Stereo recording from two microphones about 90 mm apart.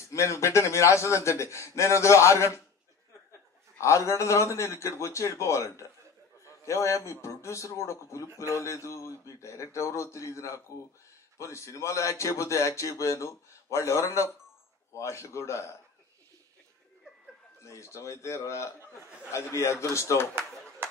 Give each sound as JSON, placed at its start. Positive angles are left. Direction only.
{"t": 0.1, "sound": "a man's voice", "side_deg": 35}
{"t": 3.8, "sound": "a man's voice", "side_deg": 35}
{"t": 17.6, "sound": "a man's voice", "side_deg": 35}